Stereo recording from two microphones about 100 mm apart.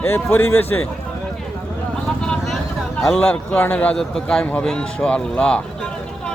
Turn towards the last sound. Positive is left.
turn(degrees=10)  # may be behind; listen again after turning